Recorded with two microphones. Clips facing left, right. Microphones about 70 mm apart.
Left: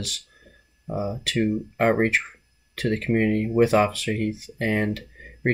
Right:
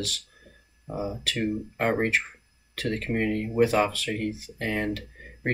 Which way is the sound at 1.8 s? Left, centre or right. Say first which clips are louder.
Left 4 dB; left.